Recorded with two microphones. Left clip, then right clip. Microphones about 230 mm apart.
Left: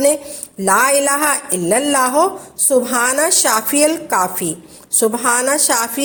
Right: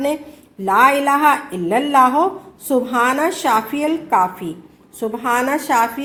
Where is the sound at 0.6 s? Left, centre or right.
Left.